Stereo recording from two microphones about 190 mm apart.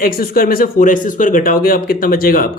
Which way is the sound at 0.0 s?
50° left (ahead or behind).